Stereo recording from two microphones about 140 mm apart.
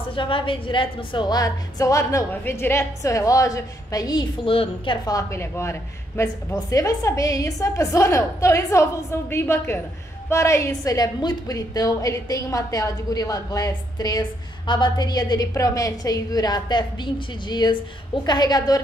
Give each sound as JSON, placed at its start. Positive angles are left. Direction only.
{"t": 0.1, "sound": "a woman's voice", "side_deg": 40}
{"t": 5.0, "sound": "a woman's voice", "side_deg": 20}